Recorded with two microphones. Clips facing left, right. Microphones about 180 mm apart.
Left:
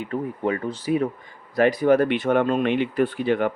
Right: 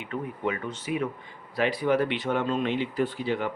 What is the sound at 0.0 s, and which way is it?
Speech, 40° left (ahead or behind).